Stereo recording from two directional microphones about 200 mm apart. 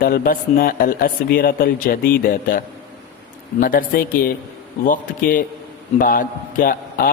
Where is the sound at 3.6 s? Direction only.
45° left (ahead or behind).